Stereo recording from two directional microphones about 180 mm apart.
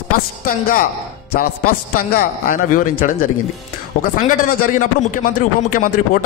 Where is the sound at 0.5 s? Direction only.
50° left (ahead or behind).